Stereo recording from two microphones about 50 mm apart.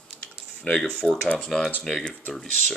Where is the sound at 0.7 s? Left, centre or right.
Centre.